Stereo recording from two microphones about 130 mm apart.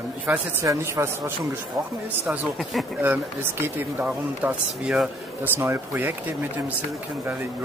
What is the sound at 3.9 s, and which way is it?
Speech, 10° right (ahead or behind).